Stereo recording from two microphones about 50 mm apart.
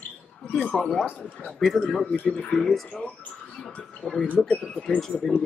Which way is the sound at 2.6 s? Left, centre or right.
Centre.